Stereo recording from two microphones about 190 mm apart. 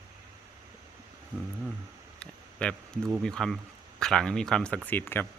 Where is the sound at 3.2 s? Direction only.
5° left (ahead or behind).